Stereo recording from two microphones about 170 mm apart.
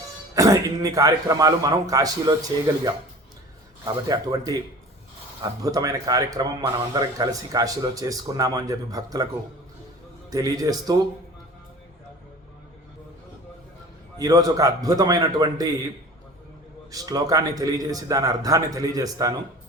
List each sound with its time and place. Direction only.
0.3 s speech: 20° right (ahead or behind)
3.8 s speech: 20° right (ahead or behind)
10.2 s speech: 20° right (ahead or behind)
14.2 s speech: 20° right (ahead or behind)
16.9 s speech: 20° right (ahead or behind)